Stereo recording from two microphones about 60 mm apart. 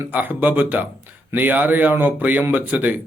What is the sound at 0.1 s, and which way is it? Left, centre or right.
A man's voice, right.